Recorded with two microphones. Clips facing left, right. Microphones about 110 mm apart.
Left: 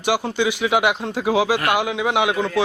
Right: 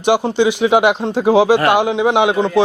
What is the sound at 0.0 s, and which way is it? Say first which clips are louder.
Speech: right 6 dB; 25° right (ahead or behind).